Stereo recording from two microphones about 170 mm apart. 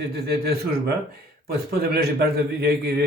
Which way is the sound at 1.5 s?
65° right (ahead or behind).